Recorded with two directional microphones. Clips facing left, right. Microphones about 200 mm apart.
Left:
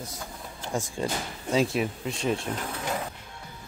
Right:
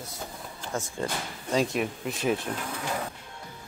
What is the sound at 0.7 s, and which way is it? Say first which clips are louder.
Speech: left 2 dB; 15° left (ahead or behind).